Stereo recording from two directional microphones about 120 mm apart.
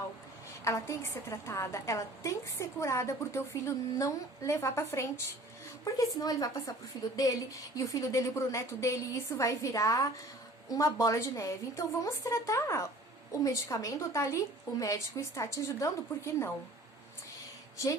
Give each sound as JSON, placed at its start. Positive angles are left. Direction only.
{"t": 0.6, "sound": "a woman's voice", "side_deg": 25}
{"t": 17.8, "sound": "a woman's voice", "side_deg": 25}